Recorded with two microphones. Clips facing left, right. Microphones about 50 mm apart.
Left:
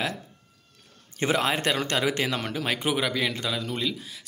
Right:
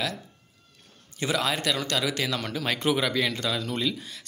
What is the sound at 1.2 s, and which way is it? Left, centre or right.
Speech, left.